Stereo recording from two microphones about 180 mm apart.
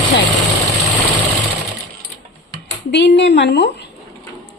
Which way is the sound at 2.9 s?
75° left (ahead or behind).